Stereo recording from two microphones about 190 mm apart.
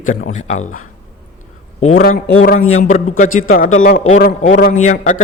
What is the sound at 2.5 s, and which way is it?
A man's voice, 35° left (ahead or behind).